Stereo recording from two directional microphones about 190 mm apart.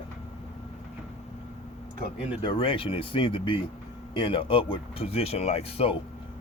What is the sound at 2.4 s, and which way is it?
Speech, 25° left (ahead or behind).